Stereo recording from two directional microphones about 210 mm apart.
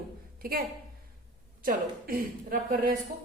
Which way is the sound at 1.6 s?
45° right (ahead or behind).